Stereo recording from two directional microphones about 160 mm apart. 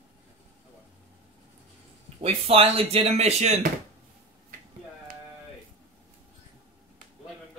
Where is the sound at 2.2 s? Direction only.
35° right (ahead or behind).